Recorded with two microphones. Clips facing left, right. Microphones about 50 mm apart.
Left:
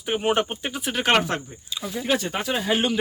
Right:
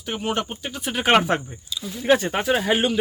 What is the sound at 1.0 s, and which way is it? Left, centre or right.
Speech, centre.